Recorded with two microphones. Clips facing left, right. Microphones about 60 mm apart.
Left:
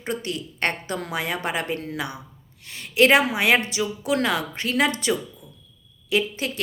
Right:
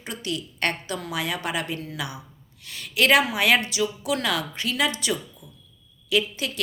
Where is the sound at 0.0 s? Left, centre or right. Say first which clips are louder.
Left 3 dB; left.